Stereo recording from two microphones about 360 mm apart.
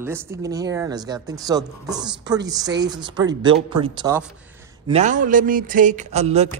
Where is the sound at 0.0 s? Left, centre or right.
Centre.